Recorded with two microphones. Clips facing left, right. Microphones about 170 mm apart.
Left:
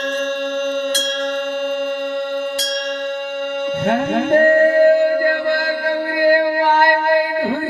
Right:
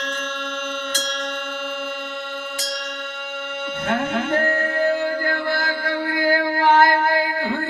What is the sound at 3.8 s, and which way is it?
Music, 50° left (ahead or behind).